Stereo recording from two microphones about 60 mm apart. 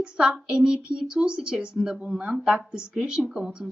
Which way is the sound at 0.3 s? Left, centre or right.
Centre.